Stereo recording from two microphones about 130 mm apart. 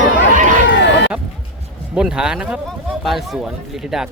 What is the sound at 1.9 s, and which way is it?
Speech, 5° right (ahead or behind).